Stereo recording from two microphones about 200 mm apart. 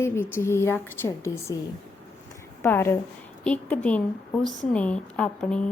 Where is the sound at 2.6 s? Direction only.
10° left (ahead or behind).